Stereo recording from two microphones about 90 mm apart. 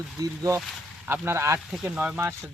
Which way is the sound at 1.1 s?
25° right (ahead or behind).